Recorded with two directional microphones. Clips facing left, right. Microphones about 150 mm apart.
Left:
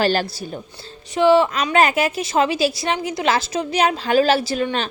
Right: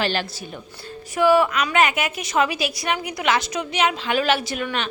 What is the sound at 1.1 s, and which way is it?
A woman's voice, 25° left (ahead or behind).